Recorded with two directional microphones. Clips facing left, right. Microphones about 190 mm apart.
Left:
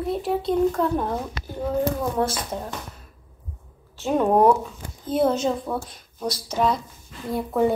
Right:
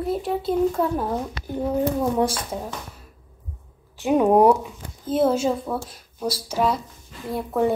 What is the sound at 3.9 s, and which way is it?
A woman's voice, 10° right (ahead or behind).